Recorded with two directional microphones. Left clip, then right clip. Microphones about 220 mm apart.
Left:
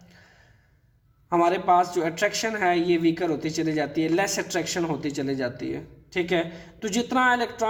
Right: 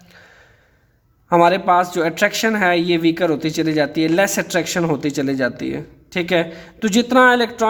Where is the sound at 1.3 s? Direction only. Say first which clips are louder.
Right 7 dB; 40° right (ahead or behind).